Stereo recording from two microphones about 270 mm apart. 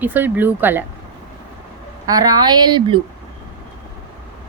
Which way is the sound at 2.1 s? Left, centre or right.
Centre.